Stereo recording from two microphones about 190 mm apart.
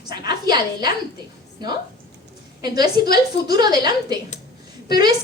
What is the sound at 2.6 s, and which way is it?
A woman's voice, 20° right (ahead or behind).